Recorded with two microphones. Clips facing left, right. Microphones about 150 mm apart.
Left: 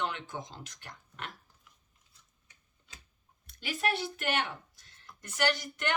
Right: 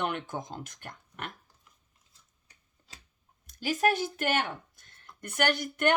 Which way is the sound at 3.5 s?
45° right (ahead or behind).